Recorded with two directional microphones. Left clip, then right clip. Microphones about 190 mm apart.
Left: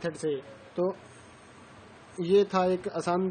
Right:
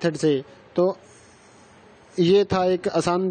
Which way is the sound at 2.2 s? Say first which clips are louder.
Right 5 dB; 45° right (ahead or behind).